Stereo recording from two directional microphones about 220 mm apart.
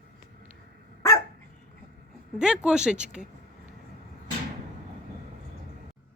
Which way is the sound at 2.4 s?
5° right (ahead or behind).